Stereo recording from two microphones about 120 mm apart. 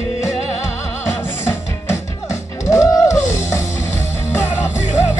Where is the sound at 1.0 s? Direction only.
20° left (ahead or behind).